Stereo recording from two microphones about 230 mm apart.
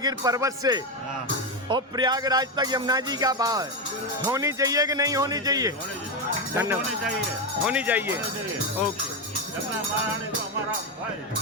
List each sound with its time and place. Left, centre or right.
0.0 s speech: centre